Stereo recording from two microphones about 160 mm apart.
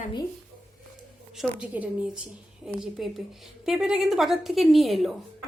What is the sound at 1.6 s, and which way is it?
A woman's voice, 10° right (ahead or behind).